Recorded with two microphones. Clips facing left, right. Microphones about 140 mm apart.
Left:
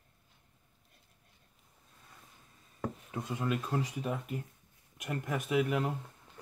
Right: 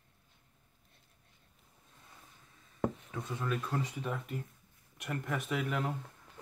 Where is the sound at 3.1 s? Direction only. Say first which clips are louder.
Left 2 dB; 10° left (ahead or behind).